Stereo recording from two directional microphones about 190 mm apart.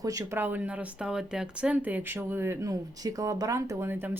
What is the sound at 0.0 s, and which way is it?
Speech, 20° right (ahead or behind).